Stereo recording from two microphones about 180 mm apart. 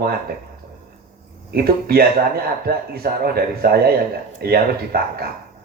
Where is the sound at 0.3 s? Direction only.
50° right (ahead or behind).